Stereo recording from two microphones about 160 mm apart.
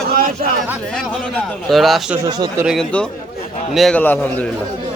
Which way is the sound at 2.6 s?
5° right (ahead or behind).